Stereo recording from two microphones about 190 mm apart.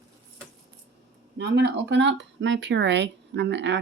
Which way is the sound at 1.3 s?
65° right (ahead or behind).